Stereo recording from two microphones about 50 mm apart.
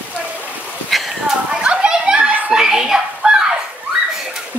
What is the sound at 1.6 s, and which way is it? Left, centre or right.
Children playing, centre.